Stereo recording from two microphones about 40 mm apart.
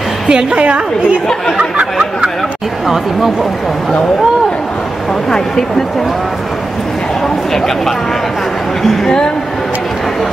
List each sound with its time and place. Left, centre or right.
0.3 s a woman's voice: centre
0.6 s a woman's voice: right
7.5 s speech: centre